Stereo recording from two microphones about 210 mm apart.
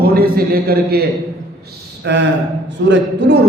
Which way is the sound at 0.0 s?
45° right (ahead or behind).